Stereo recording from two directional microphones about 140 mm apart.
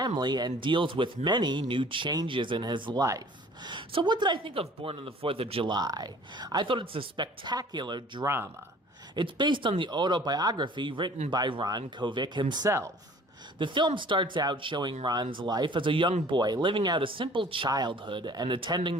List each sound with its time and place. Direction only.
0.0 s speech: 30° right (ahead or behind)
13.6 s speech: 35° right (ahead or behind)